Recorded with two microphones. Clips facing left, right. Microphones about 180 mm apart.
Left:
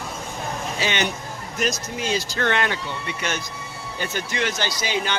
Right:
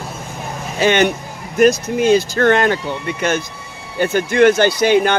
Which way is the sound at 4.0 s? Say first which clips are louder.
Right 14 dB; 55° right (ahead or behind).